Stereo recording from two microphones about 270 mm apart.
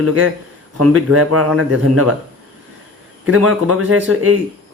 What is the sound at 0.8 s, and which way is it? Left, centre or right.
Speech, right.